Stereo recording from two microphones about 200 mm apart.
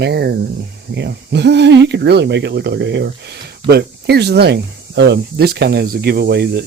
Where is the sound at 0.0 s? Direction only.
55° right (ahead or behind).